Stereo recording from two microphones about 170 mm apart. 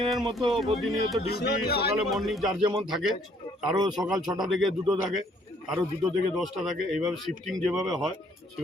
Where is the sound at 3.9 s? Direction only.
Centre (ahead or behind).